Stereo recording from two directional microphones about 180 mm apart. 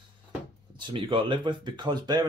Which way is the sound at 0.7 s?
30° right (ahead or behind).